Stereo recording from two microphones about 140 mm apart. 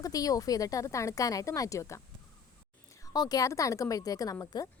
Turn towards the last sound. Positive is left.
turn(degrees=25)  # may be behind; listen again after turning